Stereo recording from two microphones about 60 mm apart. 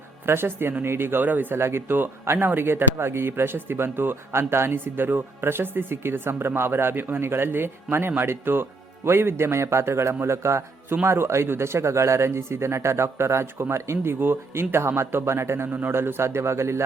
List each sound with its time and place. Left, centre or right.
0.3 s speech: right
1.5 s speech: right